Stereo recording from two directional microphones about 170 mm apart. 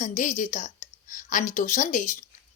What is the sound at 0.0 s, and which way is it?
A woman's voice, 45° left (ahead or behind).